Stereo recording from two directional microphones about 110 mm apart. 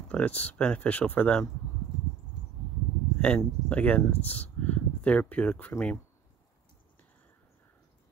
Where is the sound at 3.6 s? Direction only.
15° left (ahead or behind).